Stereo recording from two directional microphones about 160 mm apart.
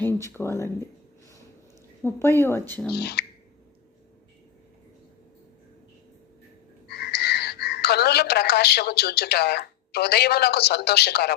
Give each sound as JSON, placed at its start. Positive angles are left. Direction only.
{"t": 0.0, "sound": "speech", "side_deg": 15}
{"t": 2.0, "sound": "speech", "side_deg": 15}
{"t": 2.9, "sound": "speech", "side_deg": 90}
{"t": 6.8, "sound": "speech", "side_deg": 90}